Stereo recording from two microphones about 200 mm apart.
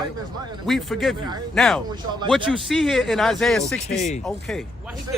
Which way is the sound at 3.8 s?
35° left (ahead or behind).